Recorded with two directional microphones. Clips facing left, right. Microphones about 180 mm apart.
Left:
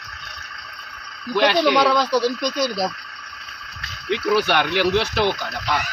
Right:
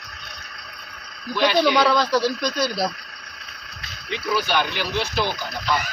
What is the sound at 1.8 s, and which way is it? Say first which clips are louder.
Speech: left 1 dB; 15° left (ahead or behind).